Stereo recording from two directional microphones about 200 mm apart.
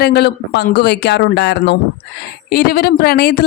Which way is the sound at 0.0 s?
55° left (ahead or behind).